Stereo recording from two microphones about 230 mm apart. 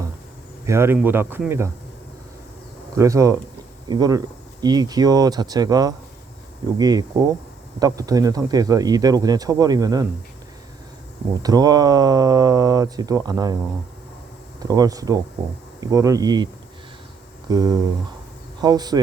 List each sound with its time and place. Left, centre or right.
0.6 s speech: centre
2.9 s speech: centre
11.4 s speech: centre
14.6 s speech: centre
17.5 s speech: centre